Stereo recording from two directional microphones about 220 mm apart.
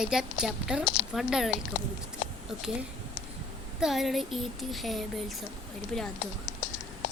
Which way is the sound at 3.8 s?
Centre (ahead or behind).